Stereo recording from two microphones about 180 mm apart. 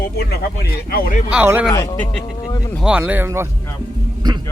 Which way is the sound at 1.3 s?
10° right (ahead or behind).